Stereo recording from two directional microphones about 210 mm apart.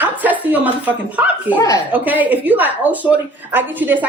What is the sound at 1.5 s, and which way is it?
Speech, 15° left (ahead or behind).